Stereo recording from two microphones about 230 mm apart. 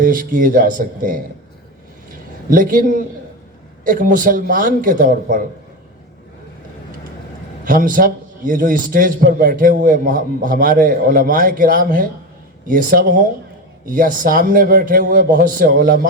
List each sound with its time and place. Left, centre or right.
0.0 s a man's voice: right
2.5 s a man's voice: right
7.6 s a man's voice: right